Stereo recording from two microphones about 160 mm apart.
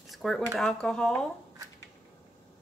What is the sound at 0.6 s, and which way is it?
Speech, 5° left (ahead or behind).